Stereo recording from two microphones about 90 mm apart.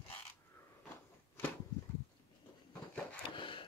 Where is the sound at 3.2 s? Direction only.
65° left (ahead or behind).